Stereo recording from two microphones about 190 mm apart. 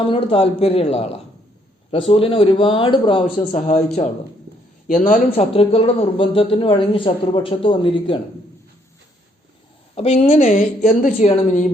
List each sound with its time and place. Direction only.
0.1 s a woman's voice: 30° left (ahead or behind)
3.3 s a man's voice: 45° left (ahead or behind)
4.9 s a man's voice: 40° left (ahead or behind)
9.9 s a woman's voice: 35° left (ahead or behind)